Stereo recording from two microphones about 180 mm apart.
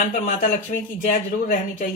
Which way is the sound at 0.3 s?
45° left (ahead or behind).